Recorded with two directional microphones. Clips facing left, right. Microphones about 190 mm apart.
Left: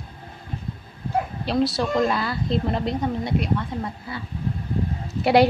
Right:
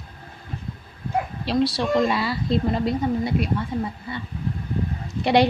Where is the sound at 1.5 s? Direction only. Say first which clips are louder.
Right 1 dB; centre (ahead or behind).